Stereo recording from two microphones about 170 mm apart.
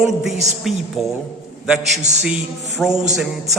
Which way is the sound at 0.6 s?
Centre (ahead or behind).